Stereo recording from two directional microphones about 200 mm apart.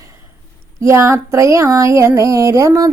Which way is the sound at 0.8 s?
15° right (ahead or behind).